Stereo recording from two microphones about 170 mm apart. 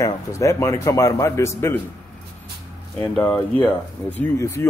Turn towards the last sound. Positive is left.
turn(degrees=15)  # may be behind; listen again after turning